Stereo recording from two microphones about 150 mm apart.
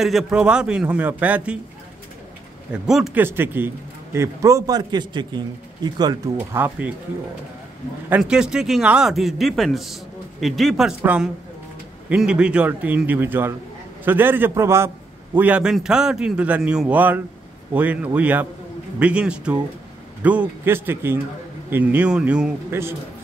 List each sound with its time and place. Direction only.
0.0 s a man's voice: centre (ahead or behind)
2.7 s a man's voice: 5° right (ahead or behind)
3.2 s a man's voice: 15° right (ahead or behind)
6.3 s a man's voice: 10° right (ahead or behind)
8.1 s a man's voice: 5° right (ahead or behind)
11.0 s a man's voice: 10° right (ahead or behind)